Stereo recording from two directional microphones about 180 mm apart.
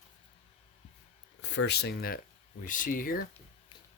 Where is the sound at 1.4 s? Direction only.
75° left (ahead or behind); by 3.2 s 50° left (ahead or behind).